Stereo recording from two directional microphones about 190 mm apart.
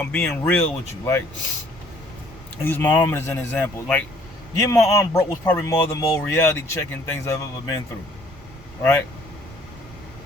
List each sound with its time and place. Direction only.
0.0 s speech: 10° left (ahead or behind)
2.6 s speech: 10° left (ahead or behind)
8.8 s speech: 10° left (ahead or behind)